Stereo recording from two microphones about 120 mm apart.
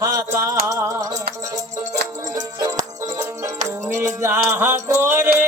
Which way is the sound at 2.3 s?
30° right (ahead or behind).